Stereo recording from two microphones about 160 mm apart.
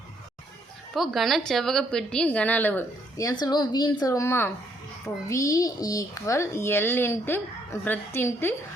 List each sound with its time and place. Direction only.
0.9 s a woman's voice: centre (ahead or behind); by 8.5 s 15° left (ahead or behind)